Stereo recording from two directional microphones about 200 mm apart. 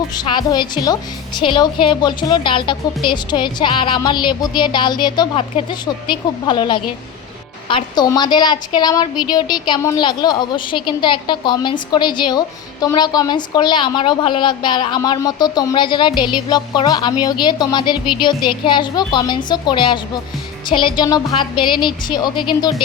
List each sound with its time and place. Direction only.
0.1 s a woman's voice: 20° left (ahead or behind)